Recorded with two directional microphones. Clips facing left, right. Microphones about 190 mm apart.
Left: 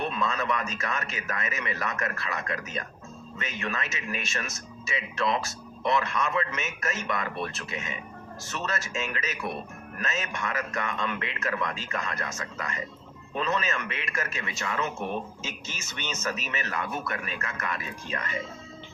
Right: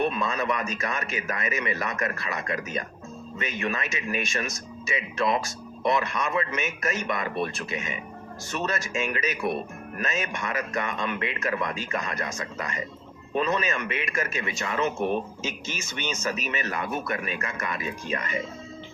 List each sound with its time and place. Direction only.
0.2 s speech: 15° right (ahead or behind)